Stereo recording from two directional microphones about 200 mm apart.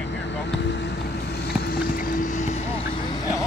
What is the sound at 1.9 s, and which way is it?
Speech, 45° left (ahead or behind).